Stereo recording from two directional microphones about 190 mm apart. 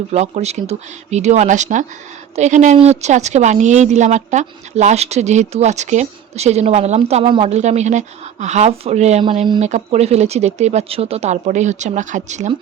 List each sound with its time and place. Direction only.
0.1 s speech: 35° right (ahead or behind)